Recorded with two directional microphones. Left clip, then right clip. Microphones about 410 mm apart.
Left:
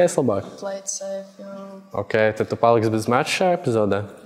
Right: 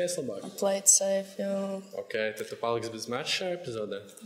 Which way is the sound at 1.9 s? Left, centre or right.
Left.